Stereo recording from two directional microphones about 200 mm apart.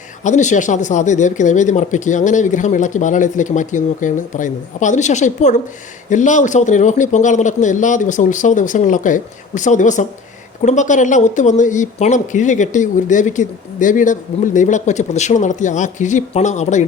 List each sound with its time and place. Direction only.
0.3 s speech: 35° left (ahead or behind)